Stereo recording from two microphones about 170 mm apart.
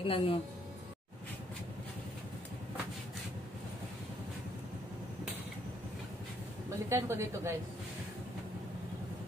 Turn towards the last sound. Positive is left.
turn(degrees=-15)  # may be behind; listen again after turning